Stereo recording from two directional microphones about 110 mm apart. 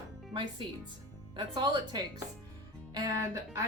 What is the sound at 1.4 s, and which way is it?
Speech, 40° right (ahead or behind).